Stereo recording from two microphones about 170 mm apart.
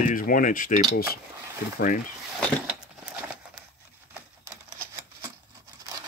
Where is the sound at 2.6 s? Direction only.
5° right (ahead or behind).